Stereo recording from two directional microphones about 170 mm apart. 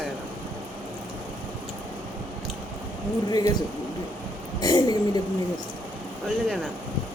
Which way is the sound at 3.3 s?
20° left (ahead or behind).